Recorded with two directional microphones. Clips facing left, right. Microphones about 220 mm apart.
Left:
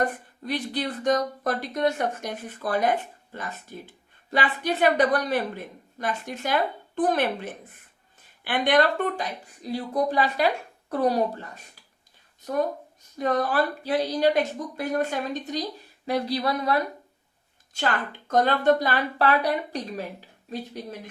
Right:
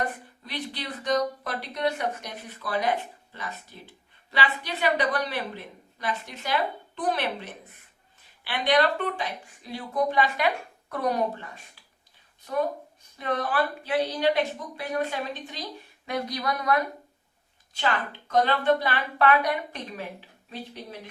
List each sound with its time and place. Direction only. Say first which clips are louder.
0.4 s a woman's voice: left 7 dB; 45° left (ahead or behind)
13.1 s a woman's voice: left 3 dB; 40° left (ahead or behind)
17.7 s a woman's voice: left 1 dB; 45° left (ahead or behind)